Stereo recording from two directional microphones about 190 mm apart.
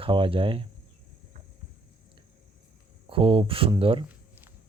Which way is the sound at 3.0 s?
30° right (ahead or behind).